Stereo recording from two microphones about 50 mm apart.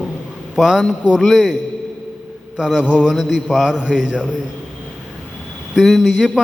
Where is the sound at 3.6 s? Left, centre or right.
Centre.